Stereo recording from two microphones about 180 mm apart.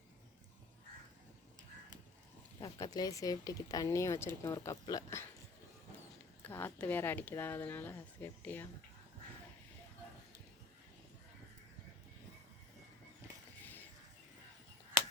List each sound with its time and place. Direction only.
2.6 s speech: 20° left (ahead or behind)
6.4 s speech: 10° left (ahead or behind)
13.6 s a sound: 10° left (ahead or behind)